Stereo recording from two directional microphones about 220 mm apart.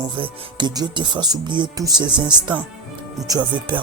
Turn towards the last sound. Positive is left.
turn(degrees=-20)  # may be behind; listen again after turning